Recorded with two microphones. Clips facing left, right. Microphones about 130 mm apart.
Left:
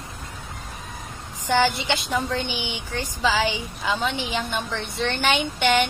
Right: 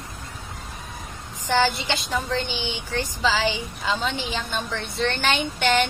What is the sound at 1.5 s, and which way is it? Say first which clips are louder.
Speech: left 1 dB; 15° left (ahead or behind).